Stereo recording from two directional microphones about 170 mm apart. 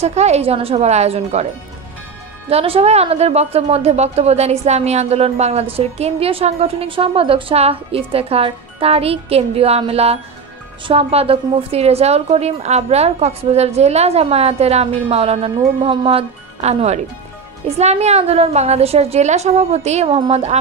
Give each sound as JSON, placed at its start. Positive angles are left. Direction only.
{"t": 0.0, "sound": "a woman's voice", "side_deg": -40}
{"t": 2.5, "sound": "a woman's voice", "side_deg": -35}